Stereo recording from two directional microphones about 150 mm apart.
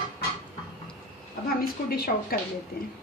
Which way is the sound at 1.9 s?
85° left.